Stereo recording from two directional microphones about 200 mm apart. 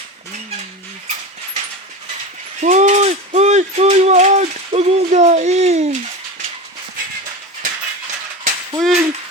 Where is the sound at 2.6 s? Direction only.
35° right (ahead or behind).